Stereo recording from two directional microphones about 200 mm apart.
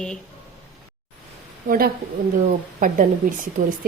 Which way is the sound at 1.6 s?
45° right (ahead or behind).